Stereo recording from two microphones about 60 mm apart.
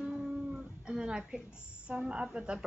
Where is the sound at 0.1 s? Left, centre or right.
Centre.